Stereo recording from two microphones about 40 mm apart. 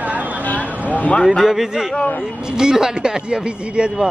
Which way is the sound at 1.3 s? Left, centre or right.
Centre.